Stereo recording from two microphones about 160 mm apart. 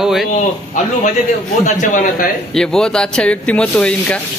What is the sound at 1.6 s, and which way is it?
Speech, 50° left (ahead or behind).